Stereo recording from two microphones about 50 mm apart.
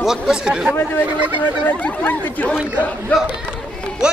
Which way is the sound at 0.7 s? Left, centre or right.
Left.